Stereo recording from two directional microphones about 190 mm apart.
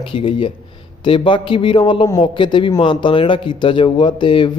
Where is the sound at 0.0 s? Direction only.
30° left (ahead or behind).